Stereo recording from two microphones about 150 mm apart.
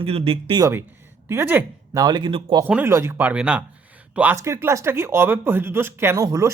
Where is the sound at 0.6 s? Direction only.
15° right (ahead or behind).